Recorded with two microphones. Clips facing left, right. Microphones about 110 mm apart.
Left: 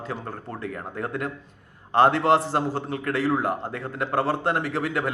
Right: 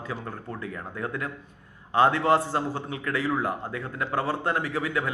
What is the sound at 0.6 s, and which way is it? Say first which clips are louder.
Speech: left 3 dB; 50° left (ahead or behind).